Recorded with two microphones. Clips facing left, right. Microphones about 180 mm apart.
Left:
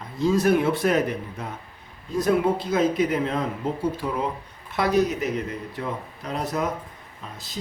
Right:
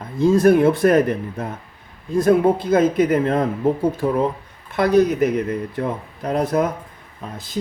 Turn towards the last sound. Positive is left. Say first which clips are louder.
# right 8 dB
turn(degrees=-50)  # may be behind; listen again after turning